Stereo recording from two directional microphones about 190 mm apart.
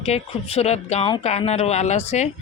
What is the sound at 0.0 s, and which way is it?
Speech, 35° left (ahead or behind).